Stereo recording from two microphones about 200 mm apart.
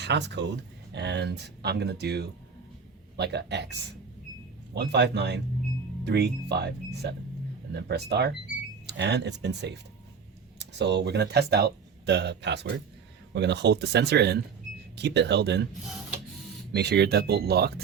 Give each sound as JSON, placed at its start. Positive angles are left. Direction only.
{"t": 0.0, "sound": "speech", "side_deg": -60}
{"t": 16.7, "sound": "speech", "side_deg": -55}